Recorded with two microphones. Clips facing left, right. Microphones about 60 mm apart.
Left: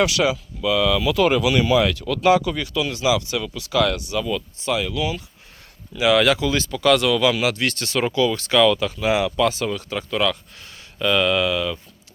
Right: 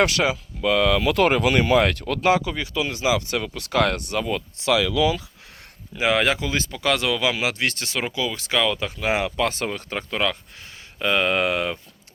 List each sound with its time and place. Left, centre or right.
0.0 s speech: right
4.5 s speech: right
6.0 s speech: right
8.0 s speech: centre
9.0 s speech: right